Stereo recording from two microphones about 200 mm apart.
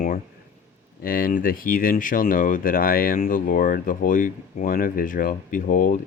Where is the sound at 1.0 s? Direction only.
45° left (ahead or behind).